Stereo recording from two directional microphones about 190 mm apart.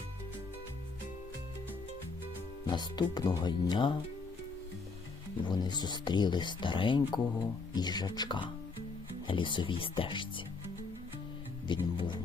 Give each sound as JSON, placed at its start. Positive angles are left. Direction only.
{"t": 2.6, "sound": "speech", "side_deg": 20}
{"t": 5.5, "sound": "speech", "side_deg": 20}
{"t": 11.7, "sound": "speech", "side_deg": 25}